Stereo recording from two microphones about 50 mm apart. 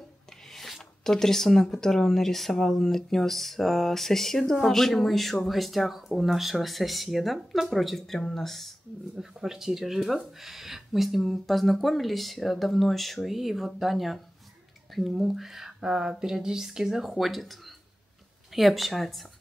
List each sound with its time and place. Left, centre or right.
0.5 s a sound: centre
1.0 s speech: centre
9.2 s speech: centre